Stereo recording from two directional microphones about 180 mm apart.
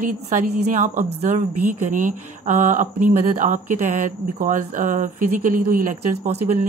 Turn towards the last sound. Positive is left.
turn(degrees=-40)  # may be behind; listen again after turning